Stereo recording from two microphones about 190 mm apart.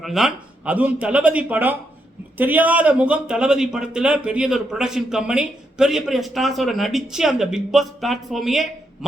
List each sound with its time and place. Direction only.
0.0 s a man's voice: centre (ahead or behind)